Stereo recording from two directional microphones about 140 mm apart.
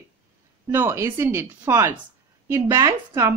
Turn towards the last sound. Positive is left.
turn(degrees=-20)  # may be behind; listen again after turning